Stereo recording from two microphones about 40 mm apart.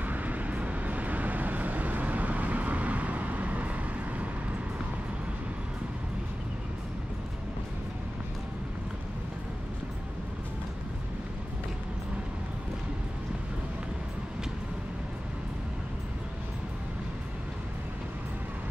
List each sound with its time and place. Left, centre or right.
0.0 s vehicle: right